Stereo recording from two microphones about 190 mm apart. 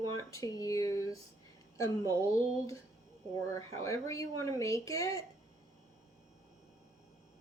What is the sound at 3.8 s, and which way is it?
Speech, 15° left (ahead or behind).